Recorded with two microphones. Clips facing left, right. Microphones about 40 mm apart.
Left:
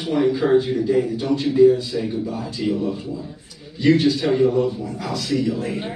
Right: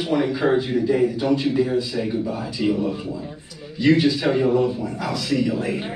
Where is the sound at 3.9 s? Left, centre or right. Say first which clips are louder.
Left 1 dB; centre.